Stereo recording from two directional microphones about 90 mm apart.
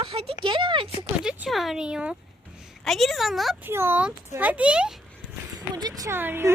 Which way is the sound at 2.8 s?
Centre (ahead or behind).